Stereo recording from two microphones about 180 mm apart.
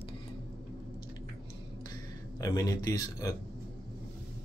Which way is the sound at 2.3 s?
20° left (ahead or behind).